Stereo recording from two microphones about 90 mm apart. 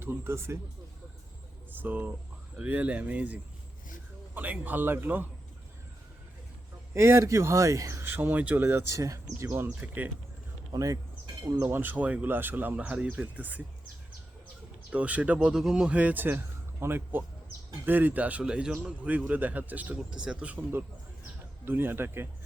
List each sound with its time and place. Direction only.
0.0 s a man's voice: 25° right (ahead or behind)
1.7 s a man's voice: 20° right (ahead or behind)
6.9 s speech: 30° right (ahead or behind)
8.6 s speech: 30° right (ahead or behind)
9.8 s a man's voice: 20° right (ahead or behind)
10.7 s speech: 40° right (ahead or behind)
11.8 s speech: 20° right (ahead or behind)
14.8 s a man's voice: 15° right (ahead or behind)
21.6 s a man's voice: 25° right (ahead or behind)